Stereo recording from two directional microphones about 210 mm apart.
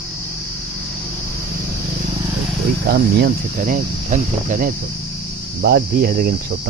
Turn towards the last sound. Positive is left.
turn(degrees=-45)  # may be behind; listen again after turning